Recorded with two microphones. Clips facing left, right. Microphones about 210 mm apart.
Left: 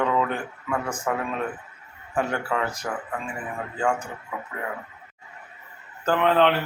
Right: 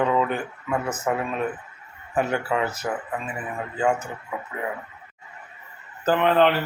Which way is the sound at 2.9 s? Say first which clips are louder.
Right 2 dB; 20° right (ahead or behind).